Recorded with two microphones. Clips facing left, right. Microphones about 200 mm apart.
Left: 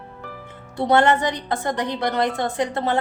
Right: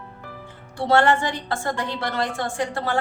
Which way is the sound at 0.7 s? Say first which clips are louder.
Left 1 dB; 20° left (ahead or behind).